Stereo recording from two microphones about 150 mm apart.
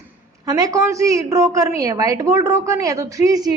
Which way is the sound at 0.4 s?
25° right (ahead or behind).